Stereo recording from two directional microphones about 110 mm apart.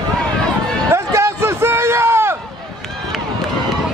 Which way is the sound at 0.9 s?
25° right (ahead or behind).